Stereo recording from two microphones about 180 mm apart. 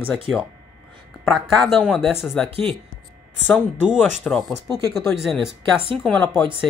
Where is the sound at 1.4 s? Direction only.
Centre (ahead or behind).